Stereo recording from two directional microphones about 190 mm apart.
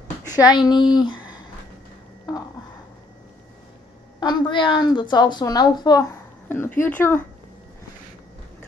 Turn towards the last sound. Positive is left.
turn(degrees=10)  # may be behind; listen again after turning